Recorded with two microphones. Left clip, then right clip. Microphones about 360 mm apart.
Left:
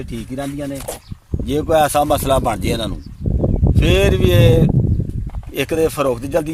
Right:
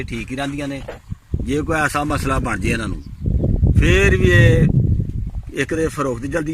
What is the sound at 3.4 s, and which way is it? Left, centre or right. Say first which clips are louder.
Sheep: left 3 dB; left.